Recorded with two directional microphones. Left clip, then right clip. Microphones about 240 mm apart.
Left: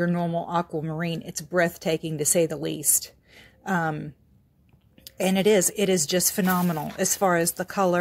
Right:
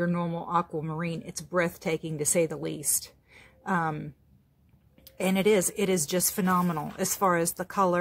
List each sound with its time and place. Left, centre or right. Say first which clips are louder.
0.0 s speech: left 4 dB; centre